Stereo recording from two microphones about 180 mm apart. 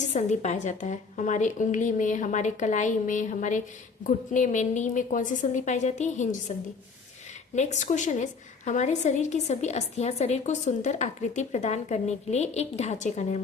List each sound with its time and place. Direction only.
0.0 s a woman's voice: 40° left (ahead or behind)